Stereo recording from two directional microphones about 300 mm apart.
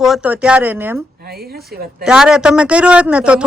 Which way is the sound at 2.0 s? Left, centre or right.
Centre.